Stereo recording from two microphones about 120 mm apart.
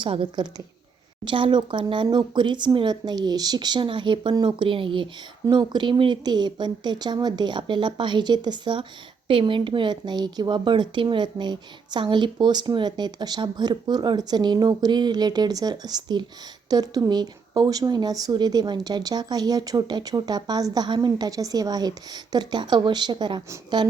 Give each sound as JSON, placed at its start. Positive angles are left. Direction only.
{"t": 0.0, "sound": "a woman's voice", "side_deg": -45}